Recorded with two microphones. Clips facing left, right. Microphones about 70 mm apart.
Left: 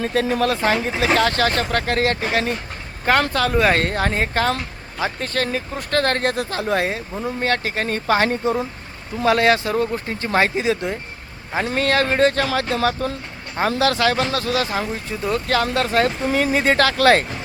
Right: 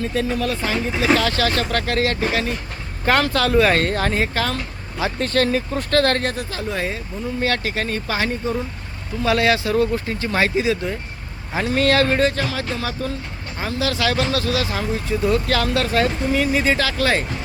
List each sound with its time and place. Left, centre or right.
0.0 s speech: left
3.2 s speech: centre
5.2 s speech: centre
5.9 s speech: left
6.3 s speech: left
7.4 s speech: left
12.2 s speech: left
14.0 s speech: left
16.7 s speech: left